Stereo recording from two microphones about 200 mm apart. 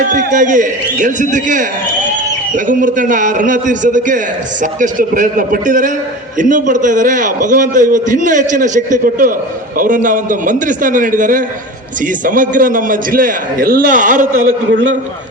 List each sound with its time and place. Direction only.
0.1 s a man's voice: 40° right (ahead or behind)
2.6 s a man's voice: 40° right (ahead or behind)